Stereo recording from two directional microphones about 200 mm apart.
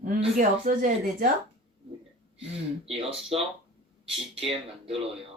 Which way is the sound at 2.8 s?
30° right (ahead or behind).